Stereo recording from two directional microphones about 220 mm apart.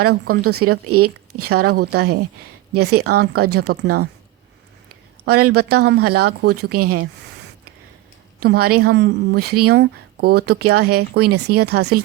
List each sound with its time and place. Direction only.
0.0 s speech: 45° right (ahead or behind)
0.9 s speech: 90° right
1.5 s speech: 45° right (ahead or behind)
5.4 s speech: 45° right (ahead or behind)
8.4 s speech: 45° right (ahead or behind)